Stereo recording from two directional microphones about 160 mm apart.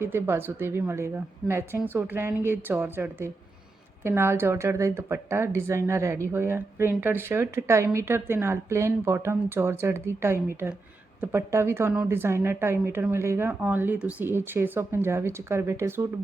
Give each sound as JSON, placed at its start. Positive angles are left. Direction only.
{"t": 0.0, "sound": "speech", "side_deg": -15}